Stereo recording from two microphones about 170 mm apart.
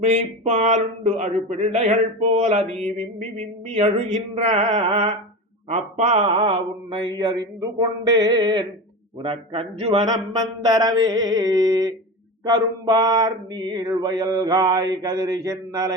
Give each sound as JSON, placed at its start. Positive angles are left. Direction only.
{"t": 0.0, "sound": "a man's voice", "side_deg": -40}
{"t": 5.6, "sound": "mantra", "side_deg": -40}
{"t": 9.2, "sound": "a man's voice", "side_deg": -35}
{"t": 10.6, "sound": "mantra", "side_deg": -20}